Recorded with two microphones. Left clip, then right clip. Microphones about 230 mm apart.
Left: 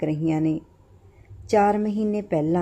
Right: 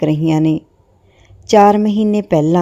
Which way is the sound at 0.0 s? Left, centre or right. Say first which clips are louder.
Right 9 dB; right.